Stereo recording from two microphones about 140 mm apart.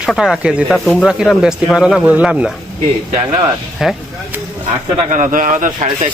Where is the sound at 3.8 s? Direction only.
Centre (ahead or behind).